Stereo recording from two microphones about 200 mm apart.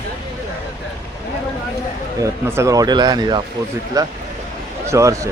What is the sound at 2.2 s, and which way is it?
Speech, 15° right (ahead or behind).